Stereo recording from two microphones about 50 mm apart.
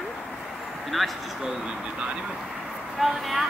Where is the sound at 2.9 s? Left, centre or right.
Centre.